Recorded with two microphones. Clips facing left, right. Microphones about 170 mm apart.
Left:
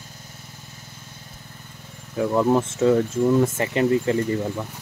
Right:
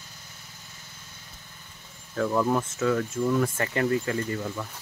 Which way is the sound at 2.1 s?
15° left (ahead or behind).